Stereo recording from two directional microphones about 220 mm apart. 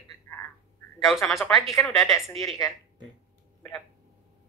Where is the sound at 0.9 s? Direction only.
Centre (ahead or behind).